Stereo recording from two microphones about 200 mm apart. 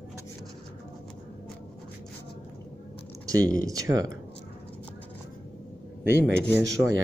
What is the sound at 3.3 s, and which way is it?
Speech, 15° right (ahead or behind).